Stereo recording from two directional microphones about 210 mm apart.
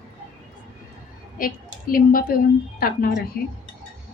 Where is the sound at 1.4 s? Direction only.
40° left (ahead or behind).